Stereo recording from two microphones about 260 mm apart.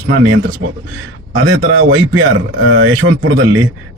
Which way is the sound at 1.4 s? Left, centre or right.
Right.